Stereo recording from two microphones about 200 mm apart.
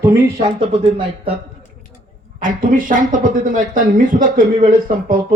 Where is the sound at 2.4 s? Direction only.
45° right (ahead or behind).